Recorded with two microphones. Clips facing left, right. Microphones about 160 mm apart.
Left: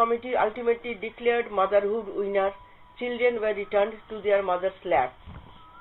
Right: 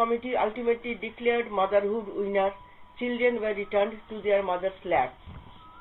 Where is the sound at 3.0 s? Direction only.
25° left (ahead or behind).